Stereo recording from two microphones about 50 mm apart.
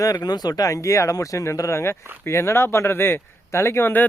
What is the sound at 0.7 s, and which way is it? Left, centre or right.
Speech, left.